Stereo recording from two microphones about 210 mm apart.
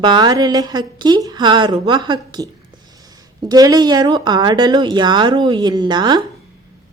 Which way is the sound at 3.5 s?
20° right (ahead or behind).